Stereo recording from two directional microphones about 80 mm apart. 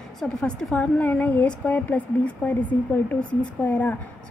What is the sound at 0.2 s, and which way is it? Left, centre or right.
A woman's voice, centre.